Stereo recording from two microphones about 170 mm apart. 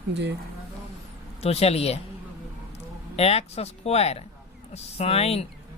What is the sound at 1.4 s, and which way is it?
Speech, 35° left (ahead or behind).